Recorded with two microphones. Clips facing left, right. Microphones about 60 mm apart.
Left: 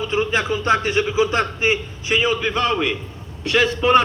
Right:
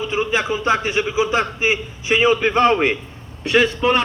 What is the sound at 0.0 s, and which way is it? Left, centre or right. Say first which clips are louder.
A man's voice: even; centre.